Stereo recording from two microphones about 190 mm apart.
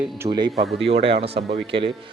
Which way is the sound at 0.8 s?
30° right (ahead or behind).